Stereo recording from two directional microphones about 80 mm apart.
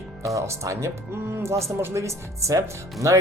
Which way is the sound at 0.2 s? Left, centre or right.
Right.